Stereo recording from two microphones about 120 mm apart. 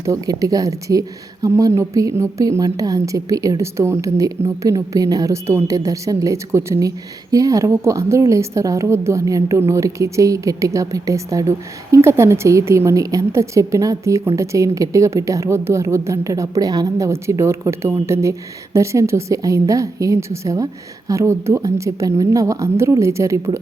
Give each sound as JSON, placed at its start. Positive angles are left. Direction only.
{"t": 0.0, "sound": "a woman's voice", "side_deg": -30}